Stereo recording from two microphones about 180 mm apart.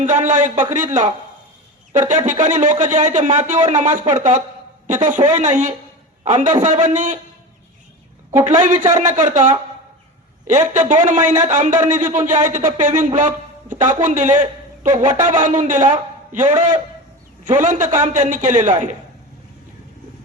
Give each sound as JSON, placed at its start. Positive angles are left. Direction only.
{"t": 0.0, "sound": "a man's voice", "side_deg": -40}
{"t": 8.3, "sound": "a man's voice", "side_deg": -40}